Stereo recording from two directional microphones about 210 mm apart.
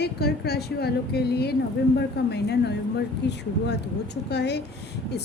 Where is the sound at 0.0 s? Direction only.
50° left (ahead or behind).